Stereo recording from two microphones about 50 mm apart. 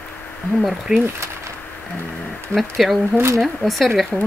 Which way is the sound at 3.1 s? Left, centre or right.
Right.